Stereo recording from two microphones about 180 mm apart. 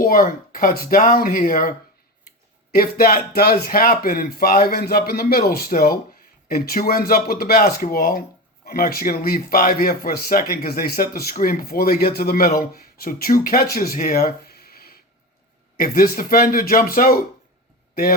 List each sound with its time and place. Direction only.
0.0 s speech: 50° left (ahead or behind)
2.7 s a man's voice: 55° left (ahead or behind)